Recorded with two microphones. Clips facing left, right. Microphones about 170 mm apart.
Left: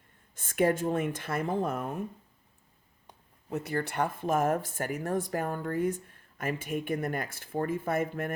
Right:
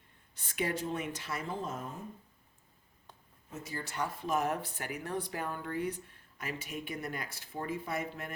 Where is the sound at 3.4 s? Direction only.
65° left (ahead or behind).